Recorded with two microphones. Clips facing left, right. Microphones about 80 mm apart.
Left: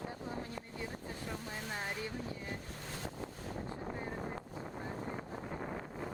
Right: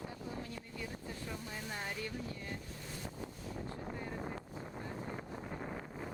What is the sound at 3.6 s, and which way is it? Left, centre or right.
Vehicle, left.